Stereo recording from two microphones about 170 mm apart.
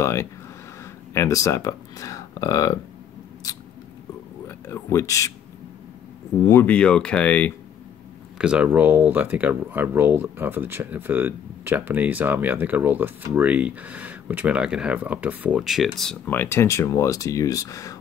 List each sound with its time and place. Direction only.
0.0 s speech: 15° left (ahead or behind)
4.5 s speech: 15° left (ahead or behind)
6.4 s speech: 15° left (ahead or behind)
8.4 s speech: 5° right (ahead or behind); by 17.9 s 20° left (ahead or behind)